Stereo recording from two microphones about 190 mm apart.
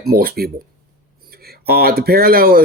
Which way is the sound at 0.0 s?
50° right (ahead or behind).